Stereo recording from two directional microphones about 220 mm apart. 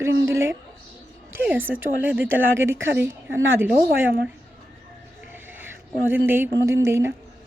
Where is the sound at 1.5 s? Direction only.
10° right (ahead or behind).